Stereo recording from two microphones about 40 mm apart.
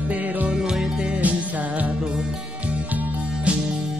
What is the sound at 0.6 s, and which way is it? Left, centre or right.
Music, centre.